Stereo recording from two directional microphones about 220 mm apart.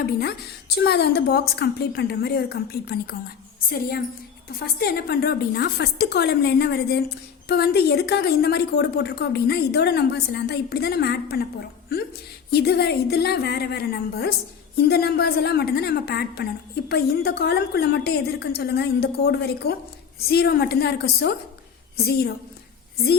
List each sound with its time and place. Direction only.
0.0 s a woman's voice: 45° left (ahead or behind)